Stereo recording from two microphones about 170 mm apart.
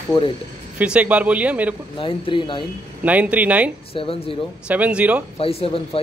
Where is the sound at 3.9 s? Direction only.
30° left (ahead or behind).